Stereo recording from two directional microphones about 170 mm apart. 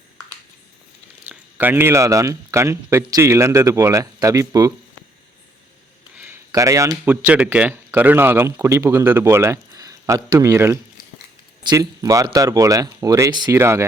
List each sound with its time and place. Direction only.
1.3 s a man's voice: 10° right (ahead or behind)
6.1 s speech: 15° right (ahead or behind)